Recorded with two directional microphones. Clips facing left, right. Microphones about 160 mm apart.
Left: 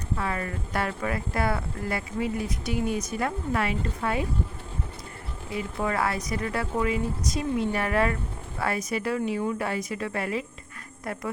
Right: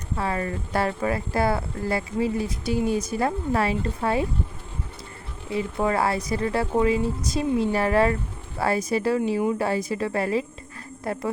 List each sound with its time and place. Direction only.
0.2 s speech: 30° right (ahead or behind)
5.5 s a woman's voice: 30° right (ahead or behind)